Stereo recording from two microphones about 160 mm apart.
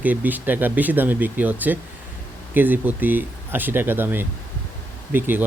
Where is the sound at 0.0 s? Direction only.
10° right (ahead or behind).